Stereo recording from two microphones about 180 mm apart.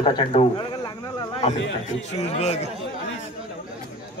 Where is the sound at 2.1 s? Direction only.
35° left (ahead or behind).